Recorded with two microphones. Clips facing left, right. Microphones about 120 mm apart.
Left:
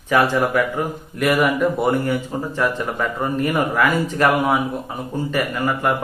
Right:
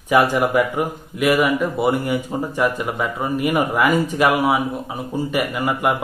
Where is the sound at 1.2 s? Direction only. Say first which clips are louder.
Even; centre (ahead or behind).